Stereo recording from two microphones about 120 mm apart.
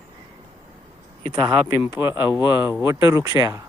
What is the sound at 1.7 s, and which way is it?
Speech, 25° right (ahead or behind).